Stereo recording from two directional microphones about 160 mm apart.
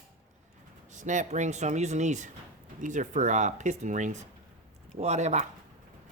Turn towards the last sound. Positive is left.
turn(degrees=-45)  # may be behind; listen again after turning